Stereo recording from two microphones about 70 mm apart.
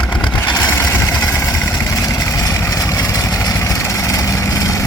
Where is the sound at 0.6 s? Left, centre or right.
Left.